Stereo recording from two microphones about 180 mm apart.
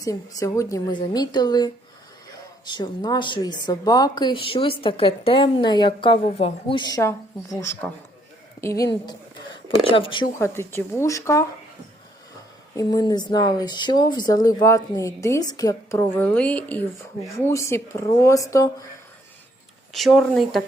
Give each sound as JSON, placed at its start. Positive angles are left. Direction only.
{"t": 0.0, "sound": "a woman's voice", "side_deg": 20}
{"t": 10.3, "sound": "speech", "side_deg": 15}
{"t": 12.7, "sound": "speech", "side_deg": 20}
{"t": 19.9, "sound": "speech", "side_deg": 0}